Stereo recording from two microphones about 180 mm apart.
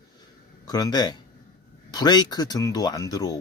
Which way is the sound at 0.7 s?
20° left (ahead or behind).